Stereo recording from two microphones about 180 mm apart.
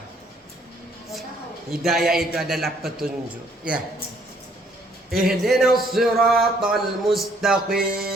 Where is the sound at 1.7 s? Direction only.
Centre (ahead or behind).